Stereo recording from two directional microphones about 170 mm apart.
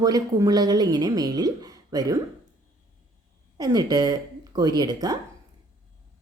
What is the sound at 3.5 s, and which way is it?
Speech, 25° right (ahead or behind).